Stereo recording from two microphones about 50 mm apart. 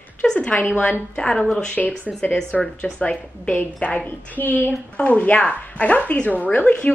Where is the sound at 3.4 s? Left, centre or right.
Left.